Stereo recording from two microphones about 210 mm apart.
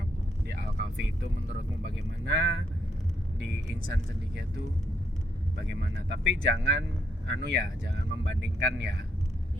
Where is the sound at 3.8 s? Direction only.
50° right (ahead or behind).